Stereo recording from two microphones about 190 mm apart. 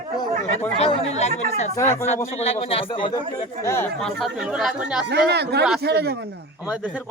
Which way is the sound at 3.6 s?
15° left (ahead or behind).